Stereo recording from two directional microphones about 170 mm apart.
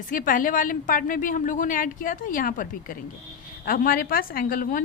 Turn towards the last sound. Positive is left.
turn(degrees=55)  # may be behind; listen again after turning